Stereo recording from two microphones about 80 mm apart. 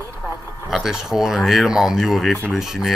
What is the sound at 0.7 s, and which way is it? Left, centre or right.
Speech, centre.